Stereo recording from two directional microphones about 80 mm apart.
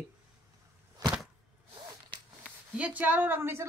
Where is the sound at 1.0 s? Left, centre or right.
Right.